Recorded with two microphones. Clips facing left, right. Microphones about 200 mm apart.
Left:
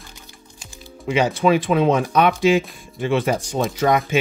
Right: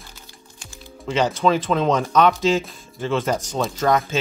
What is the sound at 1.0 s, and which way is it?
Speech, 15° left (ahead or behind).